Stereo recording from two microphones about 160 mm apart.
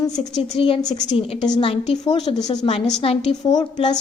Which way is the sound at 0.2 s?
35° left (ahead or behind).